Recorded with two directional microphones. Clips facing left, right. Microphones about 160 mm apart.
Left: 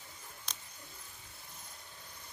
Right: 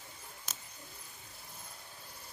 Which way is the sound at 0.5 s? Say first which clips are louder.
Even; 5° right (ahead or behind).